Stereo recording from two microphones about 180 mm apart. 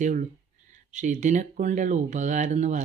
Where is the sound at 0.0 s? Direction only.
45° right (ahead or behind).